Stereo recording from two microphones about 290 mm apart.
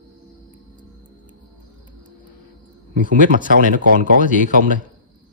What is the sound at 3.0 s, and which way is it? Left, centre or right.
Speech, right.